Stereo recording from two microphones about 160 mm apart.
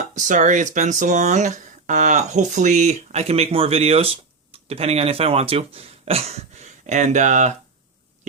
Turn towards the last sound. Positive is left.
turn(degrees=-50)  # may be behind; listen again after turning